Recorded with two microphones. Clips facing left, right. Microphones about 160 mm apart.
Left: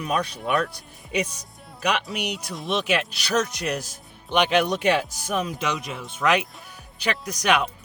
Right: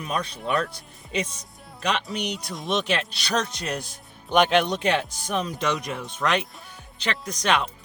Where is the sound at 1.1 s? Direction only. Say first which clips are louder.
Left 2 dB; 25° right (ahead or behind).